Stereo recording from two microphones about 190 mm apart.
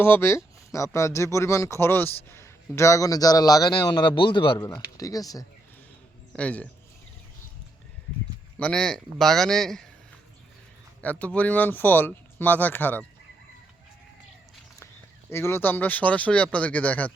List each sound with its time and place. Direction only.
0.0 s speech: 10° left (ahead or behind)
6.3 s speech: 5° left (ahead or behind)
8.5 s a man's voice: 5° left (ahead or behind)
11.0 s speech: 5° left (ahead or behind)
15.3 s speech: 15° left (ahead or behind)